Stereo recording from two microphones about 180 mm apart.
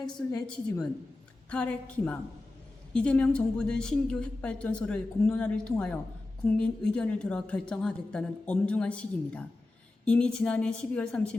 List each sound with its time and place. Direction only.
0.0 s a woman's voice: 25° left (ahead or behind)
1.5 s a woman's voice: 5° left (ahead or behind)